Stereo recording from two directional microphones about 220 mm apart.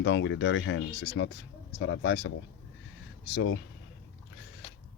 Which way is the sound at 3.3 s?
50° left (ahead or behind).